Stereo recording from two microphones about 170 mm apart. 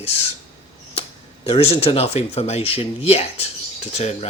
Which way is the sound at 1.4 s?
35° left (ahead or behind).